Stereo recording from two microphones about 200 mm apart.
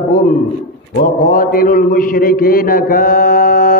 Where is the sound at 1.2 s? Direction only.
45° left (ahead or behind).